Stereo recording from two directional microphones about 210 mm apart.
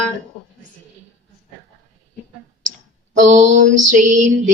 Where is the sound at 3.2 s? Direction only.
35° right (ahead or behind).